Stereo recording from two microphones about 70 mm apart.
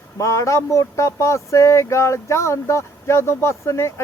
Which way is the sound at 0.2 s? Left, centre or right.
Left.